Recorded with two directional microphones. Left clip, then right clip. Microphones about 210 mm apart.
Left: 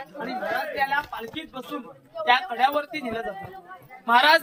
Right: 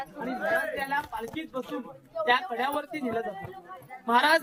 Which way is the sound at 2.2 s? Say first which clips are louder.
Left 3 dB; 55° right (ahead or behind).